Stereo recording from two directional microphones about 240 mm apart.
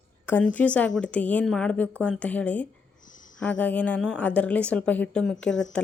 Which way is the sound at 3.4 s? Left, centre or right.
Centre.